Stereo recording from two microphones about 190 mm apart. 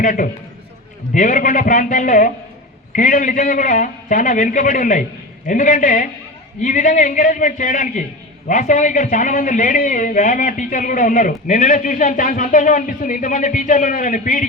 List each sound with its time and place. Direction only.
0.0 s a man's voice: 45° left (ahead or behind)